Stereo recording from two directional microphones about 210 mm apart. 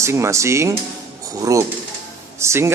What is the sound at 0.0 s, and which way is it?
A man's voice, 15° right (ahead or behind).